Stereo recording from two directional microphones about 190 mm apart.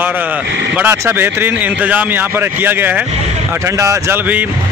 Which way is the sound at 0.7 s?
10° right (ahead or behind).